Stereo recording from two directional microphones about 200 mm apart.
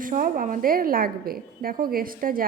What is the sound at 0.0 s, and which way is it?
A woman's voice, 45° right (ahead or behind).